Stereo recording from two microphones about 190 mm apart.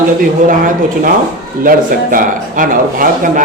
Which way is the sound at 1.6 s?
45° right (ahead or behind).